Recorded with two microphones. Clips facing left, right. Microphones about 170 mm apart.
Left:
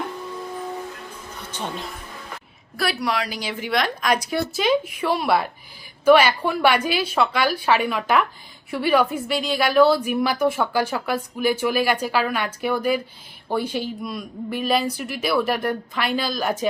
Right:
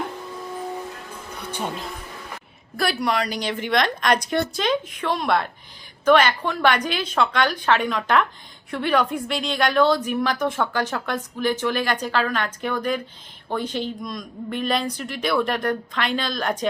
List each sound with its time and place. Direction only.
1.5 s music: 10° right (ahead or behind)
2.7 s a woman's voice: centre (ahead or behind)